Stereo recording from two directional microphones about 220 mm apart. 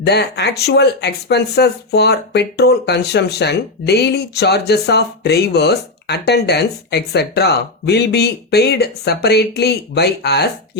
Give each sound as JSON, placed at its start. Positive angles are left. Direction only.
{"t": 0.0, "sound": "speech", "side_deg": 50}